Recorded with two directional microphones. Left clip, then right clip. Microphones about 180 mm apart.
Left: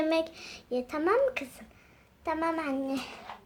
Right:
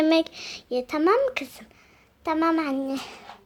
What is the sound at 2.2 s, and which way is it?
Speech, 45° right (ahead or behind).